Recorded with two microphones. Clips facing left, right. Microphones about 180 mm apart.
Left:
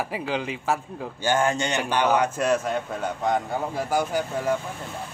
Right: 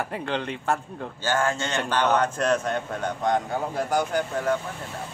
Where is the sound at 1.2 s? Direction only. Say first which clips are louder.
Left 2 dB; 20° left (ahead or behind).